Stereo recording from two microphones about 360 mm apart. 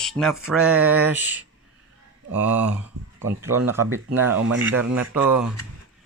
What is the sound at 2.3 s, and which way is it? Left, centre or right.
Speech, centre.